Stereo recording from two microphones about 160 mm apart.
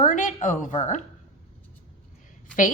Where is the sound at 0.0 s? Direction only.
55° left (ahead or behind).